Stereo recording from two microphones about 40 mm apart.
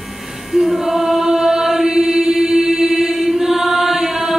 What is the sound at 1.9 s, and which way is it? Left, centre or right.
Mantra, centre.